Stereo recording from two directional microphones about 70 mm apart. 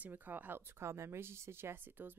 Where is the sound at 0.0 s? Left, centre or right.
Right.